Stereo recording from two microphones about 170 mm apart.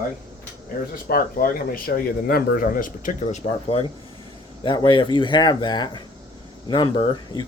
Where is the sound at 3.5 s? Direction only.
35° left (ahead or behind).